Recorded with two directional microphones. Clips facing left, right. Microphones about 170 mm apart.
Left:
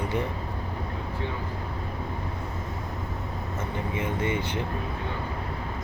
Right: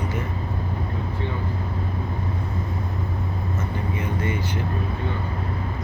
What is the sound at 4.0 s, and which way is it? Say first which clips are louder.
Speech: left 1 dB; 25° left (ahead or behind).